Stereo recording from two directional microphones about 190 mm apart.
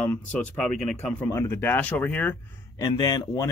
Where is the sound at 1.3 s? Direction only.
15° left (ahead or behind).